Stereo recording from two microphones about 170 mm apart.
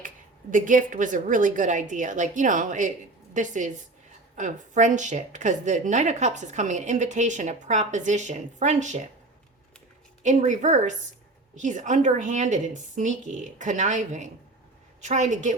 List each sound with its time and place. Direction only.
0.5 s a woman's voice: 50° right (ahead or behind)
10.2 s a woman's voice: 45° right (ahead or behind)